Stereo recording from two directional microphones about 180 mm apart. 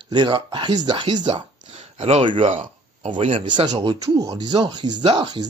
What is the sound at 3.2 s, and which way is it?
Speech, 30° right (ahead or behind).